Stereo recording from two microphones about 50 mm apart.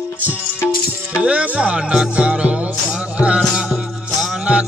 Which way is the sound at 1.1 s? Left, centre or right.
Right.